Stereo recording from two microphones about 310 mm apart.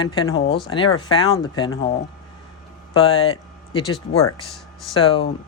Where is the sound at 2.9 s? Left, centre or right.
Centre.